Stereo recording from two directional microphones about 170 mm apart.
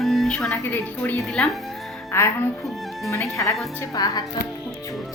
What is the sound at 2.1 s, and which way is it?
Speech, 15° left (ahead or behind).